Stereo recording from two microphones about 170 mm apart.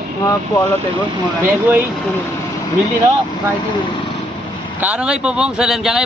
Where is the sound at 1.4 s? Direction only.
10° right (ahead or behind).